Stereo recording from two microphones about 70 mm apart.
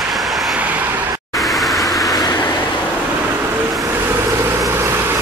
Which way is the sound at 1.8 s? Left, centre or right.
Left.